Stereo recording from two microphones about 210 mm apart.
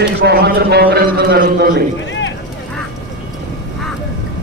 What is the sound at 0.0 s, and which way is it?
A man's voice, 50° right (ahead or behind).